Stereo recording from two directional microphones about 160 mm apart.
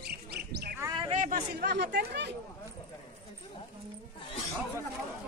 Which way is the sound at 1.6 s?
85° right.